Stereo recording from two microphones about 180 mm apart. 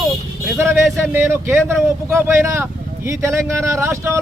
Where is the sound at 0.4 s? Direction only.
10° right (ahead or behind).